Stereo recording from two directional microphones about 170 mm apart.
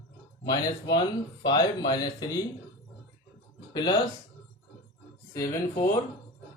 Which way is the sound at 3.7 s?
25° left (ahead or behind).